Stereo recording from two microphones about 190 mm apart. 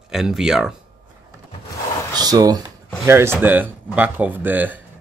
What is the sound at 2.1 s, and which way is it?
Speech, 20° right (ahead or behind).